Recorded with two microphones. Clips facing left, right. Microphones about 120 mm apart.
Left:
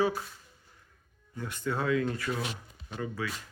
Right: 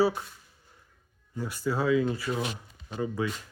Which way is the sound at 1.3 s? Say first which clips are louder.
Right 3 dB; 10° right (ahead or behind).